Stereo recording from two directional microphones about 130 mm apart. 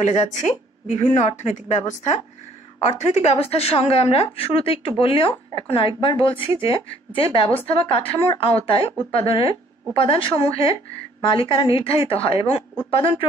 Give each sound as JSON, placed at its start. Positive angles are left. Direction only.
{"t": 0.3, "sound": "a woman's voice", "side_deg": 65}
{"t": 2.8, "sound": "speech", "side_deg": 50}